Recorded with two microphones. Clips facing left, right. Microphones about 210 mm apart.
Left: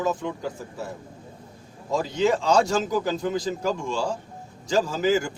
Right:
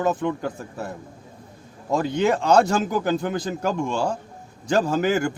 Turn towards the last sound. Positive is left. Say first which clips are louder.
# right 2 dB
turn(degrees=-60)  # may be behind; listen again after turning